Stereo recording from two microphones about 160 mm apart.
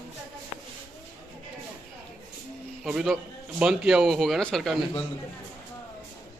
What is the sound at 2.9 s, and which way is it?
A man's voice, 5° right (ahead or behind).